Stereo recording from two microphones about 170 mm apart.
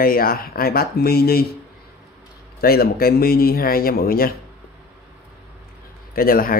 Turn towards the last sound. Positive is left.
turn(degrees=60)  # may be behind; listen again after turning